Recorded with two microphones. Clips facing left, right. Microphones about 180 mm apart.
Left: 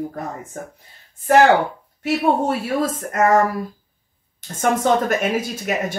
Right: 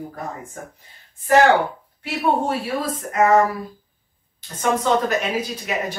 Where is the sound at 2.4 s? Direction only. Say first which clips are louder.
Left 3 dB; 45° left (ahead or behind).